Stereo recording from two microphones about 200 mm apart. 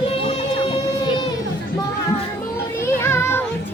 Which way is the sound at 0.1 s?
25° left (ahead or behind).